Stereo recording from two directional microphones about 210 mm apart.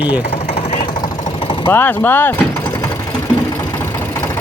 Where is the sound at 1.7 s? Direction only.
10° left (ahead or behind).